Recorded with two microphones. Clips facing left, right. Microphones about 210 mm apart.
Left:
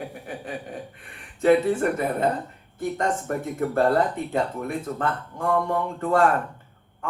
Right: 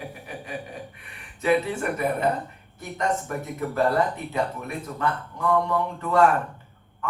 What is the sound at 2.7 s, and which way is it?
Speech, 50° left (ahead or behind).